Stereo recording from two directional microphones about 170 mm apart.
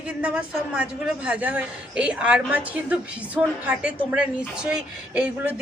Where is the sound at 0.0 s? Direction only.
5° right (ahead or behind).